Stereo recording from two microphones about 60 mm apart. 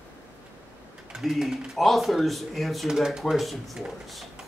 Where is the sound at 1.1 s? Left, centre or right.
Centre.